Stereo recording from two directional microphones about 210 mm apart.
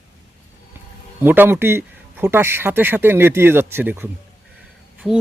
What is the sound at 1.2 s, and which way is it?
Speech, 10° right (ahead or behind).